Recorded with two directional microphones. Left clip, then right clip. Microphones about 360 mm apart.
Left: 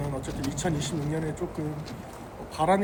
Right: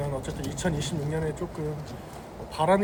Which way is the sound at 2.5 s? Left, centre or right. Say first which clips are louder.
Right 1 dB; centre.